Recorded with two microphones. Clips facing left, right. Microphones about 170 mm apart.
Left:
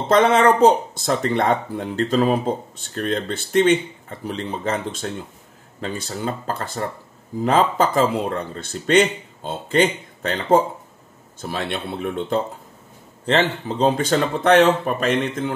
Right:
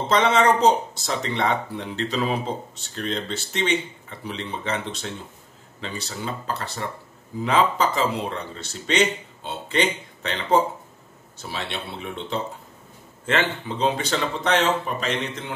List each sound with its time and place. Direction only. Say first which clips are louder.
0.1 s speech: left 4 dB; 55° left (ahead or behind)
13.2 s speech: left 4 dB; 35° left (ahead or behind)